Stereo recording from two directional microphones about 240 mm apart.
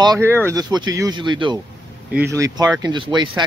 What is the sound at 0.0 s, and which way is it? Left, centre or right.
Speech, centre.